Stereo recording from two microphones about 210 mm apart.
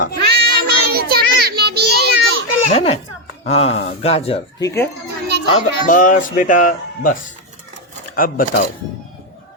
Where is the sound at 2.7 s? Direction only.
30° left (ahead or behind).